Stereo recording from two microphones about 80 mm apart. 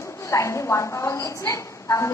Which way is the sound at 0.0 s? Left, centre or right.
Left.